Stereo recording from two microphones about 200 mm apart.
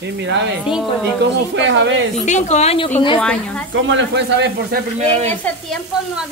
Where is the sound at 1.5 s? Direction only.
70° right (ahead or behind).